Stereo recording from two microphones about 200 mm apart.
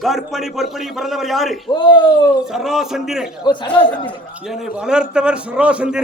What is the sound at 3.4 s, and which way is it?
Speech, 20° left (ahead or behind).